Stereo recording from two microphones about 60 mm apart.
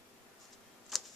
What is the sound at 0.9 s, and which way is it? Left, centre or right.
Typewriter, centre.